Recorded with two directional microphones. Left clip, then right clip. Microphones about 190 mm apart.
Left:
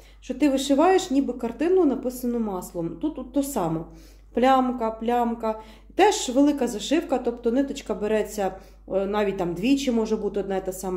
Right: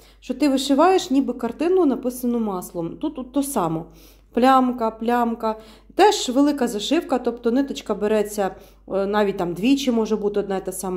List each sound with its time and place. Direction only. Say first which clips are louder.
0.3 s speech: right 2 dB; 35° right (ahead or behind)